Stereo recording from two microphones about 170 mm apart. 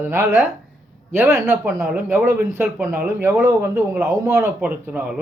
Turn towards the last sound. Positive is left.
turn(degrees=-5)  # may be behind; listen again after turning